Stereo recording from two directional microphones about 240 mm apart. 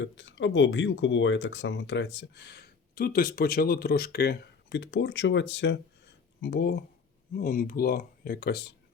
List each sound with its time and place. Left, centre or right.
0.0 s speech: left